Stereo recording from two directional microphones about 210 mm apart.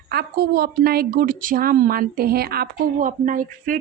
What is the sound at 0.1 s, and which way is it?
A woman's voice, 50° right (ahead or behind).